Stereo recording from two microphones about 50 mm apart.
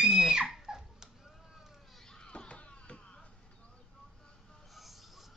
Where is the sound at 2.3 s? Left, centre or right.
Left.